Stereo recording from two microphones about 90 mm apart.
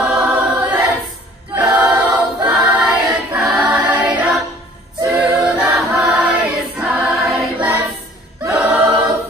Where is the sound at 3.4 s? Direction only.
10° right (ahead or behind).